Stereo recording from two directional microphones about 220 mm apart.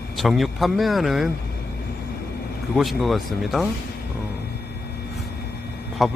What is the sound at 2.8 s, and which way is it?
Speech, centre (ahead or behind).